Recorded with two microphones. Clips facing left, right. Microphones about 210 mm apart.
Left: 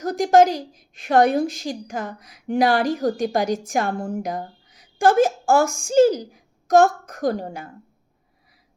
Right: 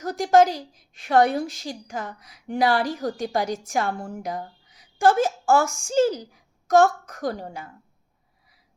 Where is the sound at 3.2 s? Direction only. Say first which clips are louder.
Left 4 dB; 15° left (ahead or behind).